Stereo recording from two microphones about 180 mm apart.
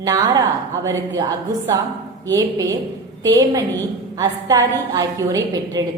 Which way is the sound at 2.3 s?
20° right (ahead or behind).